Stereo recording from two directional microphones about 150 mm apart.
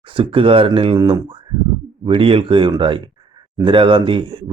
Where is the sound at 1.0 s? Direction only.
25° right (ahead or behind).